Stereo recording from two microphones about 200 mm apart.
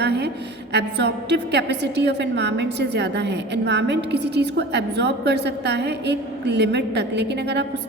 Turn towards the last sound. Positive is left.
turn(degrees=-60)  # may be behind; listen again after turning